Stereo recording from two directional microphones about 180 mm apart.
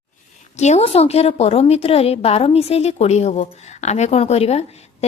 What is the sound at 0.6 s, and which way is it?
A woman's voice, 35° left (ahead or behind).